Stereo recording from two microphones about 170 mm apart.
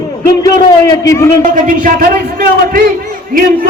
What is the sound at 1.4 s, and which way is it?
A man's voice, 50° right (ahead or behind).